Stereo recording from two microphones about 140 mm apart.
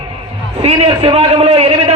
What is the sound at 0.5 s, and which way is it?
A man's voice, 45° right (ahead or behind).